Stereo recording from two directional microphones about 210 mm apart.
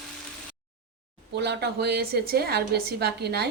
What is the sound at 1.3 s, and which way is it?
A woman's voice, 55° right (ahead or behind).